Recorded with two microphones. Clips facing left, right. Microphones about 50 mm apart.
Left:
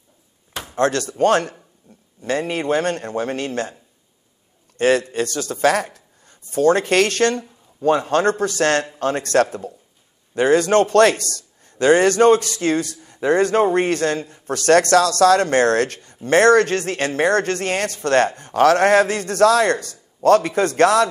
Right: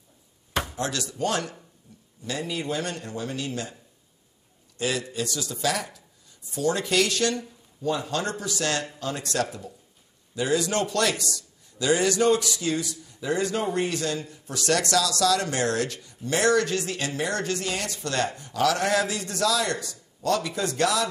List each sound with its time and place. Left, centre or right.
0.7 s speech: left
1.9 s a sound: left
2.2 s speech: left
4.7 s speech: left